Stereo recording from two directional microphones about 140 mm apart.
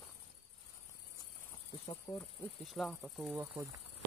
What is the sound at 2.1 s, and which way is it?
Insect, 30° left (ahead or behind).